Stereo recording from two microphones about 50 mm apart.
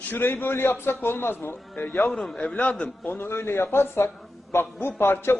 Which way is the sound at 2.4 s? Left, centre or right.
Left.